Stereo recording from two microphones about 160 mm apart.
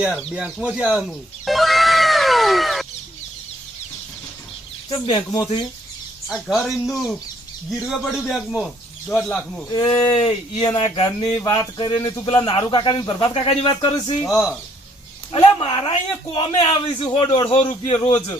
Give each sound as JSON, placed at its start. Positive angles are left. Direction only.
{"t": 0.2, "sound": "cat", "side_deg": -5}
{"t": 4.9, "sound": "speech", "side_deg": 30}
{"t": 6.2, "sound": "speech", "side_deg": 0}
{"t": 9.7, "sound": "speech", "side_deg": 25}
{"t": 10.2, "sound": "speech", "side_deg": 45}
{"t": 10.6, "sound": "speech", "side_deg": 25}
{"t": 14.3, "sound": "speech", "side_deg": 0}
{"t": 15.3, "sound": "speech", "side_deg": 35}